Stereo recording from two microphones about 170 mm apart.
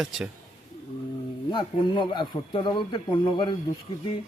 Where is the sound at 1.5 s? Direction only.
25° left (ahead or behind).